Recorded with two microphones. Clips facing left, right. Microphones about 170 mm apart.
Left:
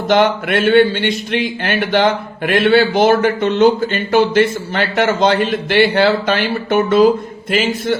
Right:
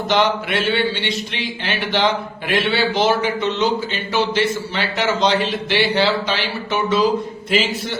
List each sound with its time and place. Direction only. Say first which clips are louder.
0.1 s a man's voice: left 5 dB; 50° left (ahead or behind)